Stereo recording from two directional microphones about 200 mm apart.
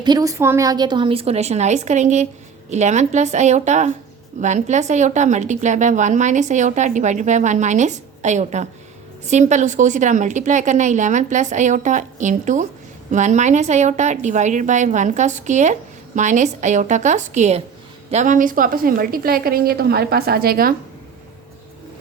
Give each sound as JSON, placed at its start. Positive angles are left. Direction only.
{"t": 0.0, "sound": "a woman's voice", "side_deg": -20}